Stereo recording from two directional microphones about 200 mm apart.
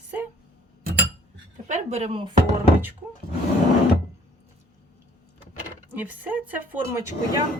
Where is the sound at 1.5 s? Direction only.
35° right (ahead or behind).